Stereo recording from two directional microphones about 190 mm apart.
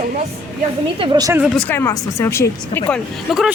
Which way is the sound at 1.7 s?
15° left (ahead or behind).